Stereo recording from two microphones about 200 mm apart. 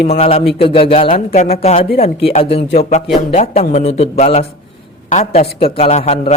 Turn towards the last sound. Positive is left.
turn(degrees=35)  # may be behind; listen again after turning